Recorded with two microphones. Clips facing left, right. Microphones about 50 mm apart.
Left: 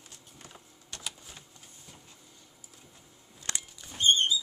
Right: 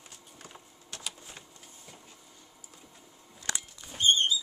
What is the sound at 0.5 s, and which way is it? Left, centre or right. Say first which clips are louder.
Typing: right 1 dB; centre.